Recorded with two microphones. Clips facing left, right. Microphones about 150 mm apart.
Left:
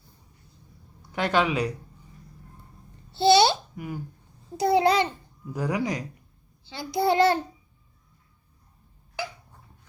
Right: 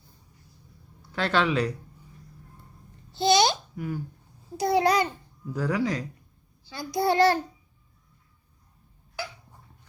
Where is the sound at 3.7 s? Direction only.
10° left (ahead or behind).